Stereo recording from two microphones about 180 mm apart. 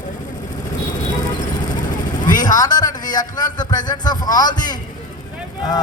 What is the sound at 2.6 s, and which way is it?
Speech, 20° left (ahead or behind).